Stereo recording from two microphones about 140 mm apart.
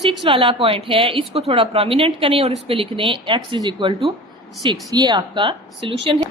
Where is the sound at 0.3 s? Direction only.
40° right (ahead or behind).